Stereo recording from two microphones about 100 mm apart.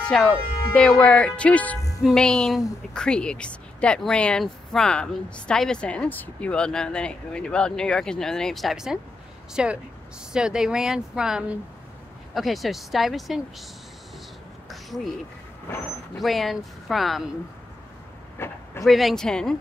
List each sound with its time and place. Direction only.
0.0 s speech: 5° left (ahead or behind)
15.7 s speech: 25° left (ahead or behind)
16.2 s speech: centre (ahead or behind)
18.4 s speech: 25° left (ahead or behind)
18.9 s speech: centre (ahead or behind)